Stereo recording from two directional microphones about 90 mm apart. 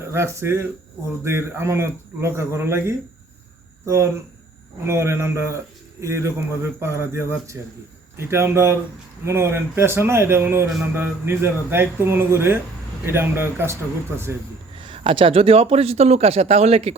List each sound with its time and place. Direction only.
0.1 s a man's voice: 30° right (ahead or behind)
14.8 s speech: 75° right (ahead or behind)